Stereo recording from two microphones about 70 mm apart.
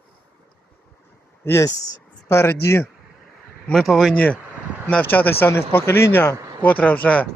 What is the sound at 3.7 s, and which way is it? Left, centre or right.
Speech, centre.